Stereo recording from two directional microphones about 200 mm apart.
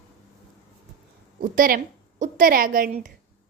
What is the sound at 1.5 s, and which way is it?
A woman's voice, 45° right (ahead or behind).